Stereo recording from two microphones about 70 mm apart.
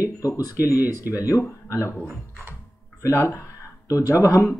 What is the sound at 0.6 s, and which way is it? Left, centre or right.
Speech, right.